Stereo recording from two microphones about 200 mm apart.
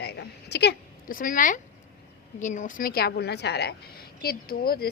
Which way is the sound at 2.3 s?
40° left (ahead or behind).